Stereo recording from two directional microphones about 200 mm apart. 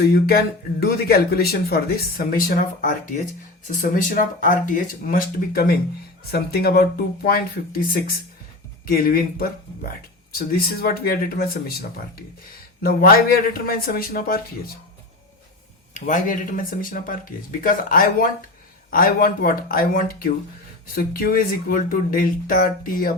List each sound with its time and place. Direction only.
0.1 s speech: 50° left (ahead or behind)
8.9 s speech: 45° left (ahead or behind)
16.0 s speech: 40° left (ahead or behind)